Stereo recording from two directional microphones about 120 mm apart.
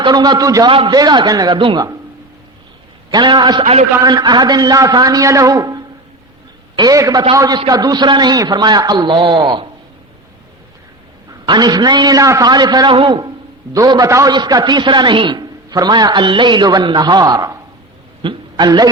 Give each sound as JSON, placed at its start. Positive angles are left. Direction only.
{"t": 0.0, "sound": "a man's voice", "side_deg": -35}
{"t": 0.7, "sound": "a man's voice", "side_deg": -45}
{"t": 3.1, "sound": "a man's voice", "side_deg": -40}
{"t": 3.6, "sound": "a man's voice", "side_deg": -55}
{"t": 4.0, "sound": "a man's voice", "side_deg": -35}
{"t": 11.4, "sound": "a man's voice", "side_deg": -35}